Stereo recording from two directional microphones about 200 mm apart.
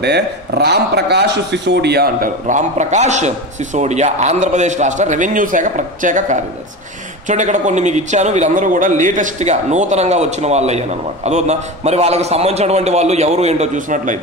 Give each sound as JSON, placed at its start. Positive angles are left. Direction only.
{"t": 0.0, "sound": "a man's voice", "side_deg": -55}